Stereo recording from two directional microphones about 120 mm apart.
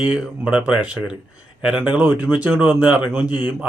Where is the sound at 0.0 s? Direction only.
10° right (ahead or behind).